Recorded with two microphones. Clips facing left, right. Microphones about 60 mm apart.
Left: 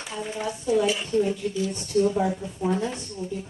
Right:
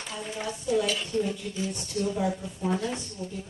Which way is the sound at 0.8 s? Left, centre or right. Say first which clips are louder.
Left 5 dB; left.